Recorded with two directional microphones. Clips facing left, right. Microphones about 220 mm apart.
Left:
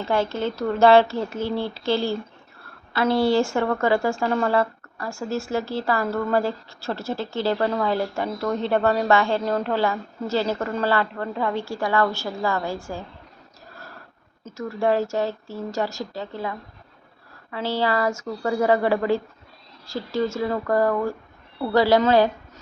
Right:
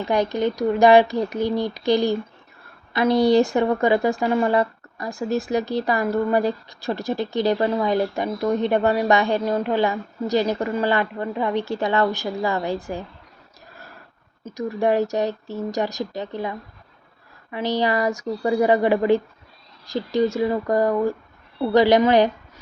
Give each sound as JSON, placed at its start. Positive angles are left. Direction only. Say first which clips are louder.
{"t": 0.0, "sound": "a woman's voice", "louder": "right 3 dB", "side_deg": -15}
{"t": 14.4, "sound": "a woman's voice", "louder": "right 2 dB", "side_deg": -15}